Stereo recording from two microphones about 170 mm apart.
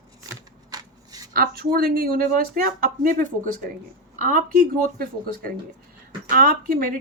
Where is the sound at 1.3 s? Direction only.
60° right (ahead or behind).